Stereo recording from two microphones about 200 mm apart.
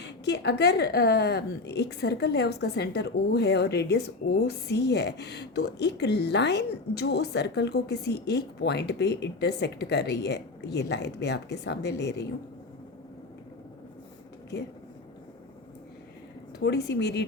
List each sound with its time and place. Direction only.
0.0 s a woman's voice: 60° left (ahead or behind)
16.6 s a woman's voice: 55° left (ahead or behind)